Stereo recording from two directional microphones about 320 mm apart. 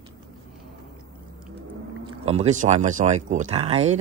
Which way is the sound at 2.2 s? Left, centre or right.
Right.